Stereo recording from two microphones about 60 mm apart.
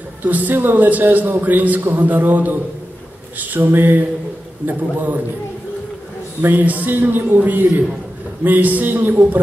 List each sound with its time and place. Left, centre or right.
0.2 s a man's voice: right
6.5 s a man's voice: right